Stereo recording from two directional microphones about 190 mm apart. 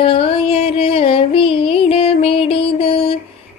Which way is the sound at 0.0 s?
30° left (ahead or behind).